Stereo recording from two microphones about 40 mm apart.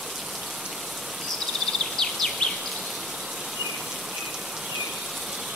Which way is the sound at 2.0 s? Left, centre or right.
Centre.